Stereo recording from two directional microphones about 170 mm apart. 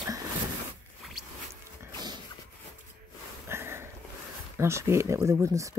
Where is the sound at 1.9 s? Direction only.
25° right (ahead or behind).